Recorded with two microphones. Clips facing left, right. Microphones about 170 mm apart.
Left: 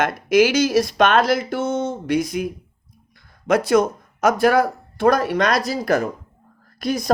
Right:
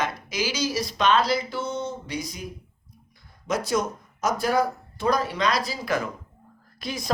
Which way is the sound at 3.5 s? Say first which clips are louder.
Left 9 dB; 60° left (ahead or behind).